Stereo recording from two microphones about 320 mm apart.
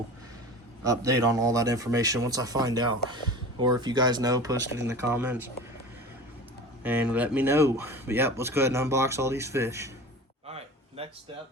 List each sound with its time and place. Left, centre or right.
0.9 s speech: centre
6.8 s speech: centre
10.4 s a sound: centre